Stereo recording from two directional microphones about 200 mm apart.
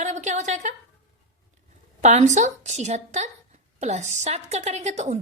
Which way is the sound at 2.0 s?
35° right (ahead or behind).